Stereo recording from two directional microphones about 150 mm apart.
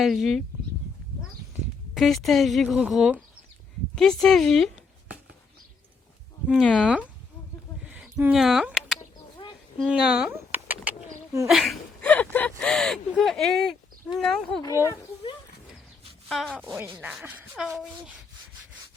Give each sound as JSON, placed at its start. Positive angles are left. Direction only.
{"t": 0.0, "sound": "speech", "side_deg": 0}
{"t": 2.0, "sound": "speech", "side_deg": 0}
{"t": 6.5, "sound": "speech", "side_deg": 5}
{"t": 7.9, "sound": "a sound", "side_deg": -5}
{"t": 8.2, "sound": "speech", "side_deg": -5}
{"t": 10.3, "sound": "a sound", "side_deg": -10}
{"t": 11.4, "sound": "speech", "side_deg": 0}
{"t": 14.6, "sound": "speech", "side_deg": 20}
{"t": 16.3, "sound": "speech", "side_deg": 5}
{"t": 16.6, "sound": "rub", "side_deg": -15}
{"t": 17.5, "sound": "speech", "side_deg": 0}